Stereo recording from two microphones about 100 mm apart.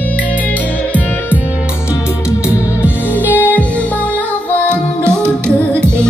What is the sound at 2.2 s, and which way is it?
Music, 25° left (ahead or behind).